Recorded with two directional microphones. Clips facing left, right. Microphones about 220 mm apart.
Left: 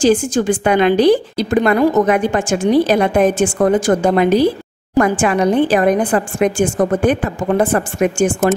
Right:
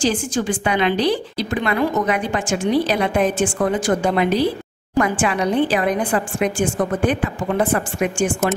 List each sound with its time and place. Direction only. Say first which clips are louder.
0.0 s a woman's voice: left 7 dB; 45° left (ahead or behind)